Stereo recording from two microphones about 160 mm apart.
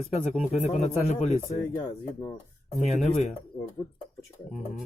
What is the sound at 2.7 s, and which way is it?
Speech, 45° left (ahead or behind).